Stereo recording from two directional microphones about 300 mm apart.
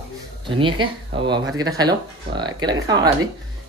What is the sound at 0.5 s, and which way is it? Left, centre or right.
Speech, centre.